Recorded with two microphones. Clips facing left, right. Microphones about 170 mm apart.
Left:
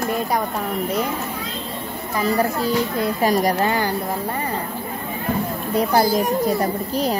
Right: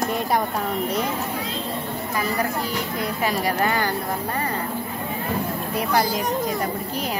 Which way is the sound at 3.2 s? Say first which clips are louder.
Left 6 dB; 40° left (ahead or behind).